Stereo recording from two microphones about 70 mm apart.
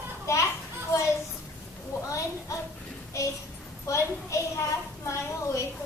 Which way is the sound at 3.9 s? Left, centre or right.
Left.